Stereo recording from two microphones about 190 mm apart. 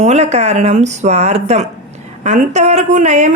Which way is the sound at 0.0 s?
35° right (ahead or behind).